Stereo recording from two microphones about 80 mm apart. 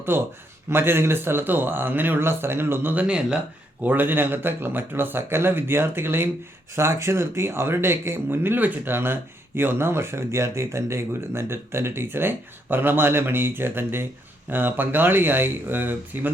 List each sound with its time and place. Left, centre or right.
0.1 s speech: right; by 3.3 s centre
3.8 s speech: right